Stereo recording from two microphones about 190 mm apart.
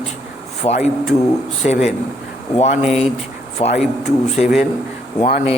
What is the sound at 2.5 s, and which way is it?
A man's voice, 35° left (ahead or behind).